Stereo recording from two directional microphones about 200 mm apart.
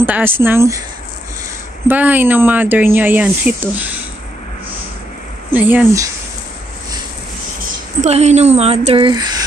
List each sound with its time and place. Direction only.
0.0 s speech: 10° right (ahead or behind)
1.9 s speech: 10° right (ahead or behind)
5.5 s speech: 10° right (ahead or behind)
8.0 s speech: 35° right (ahead or behind)